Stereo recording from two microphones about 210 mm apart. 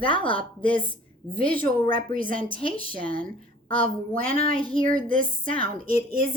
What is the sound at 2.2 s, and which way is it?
Speech, 25° left (ahead or behind).